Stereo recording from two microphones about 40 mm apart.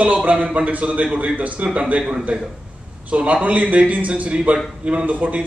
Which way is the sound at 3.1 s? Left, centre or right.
Right.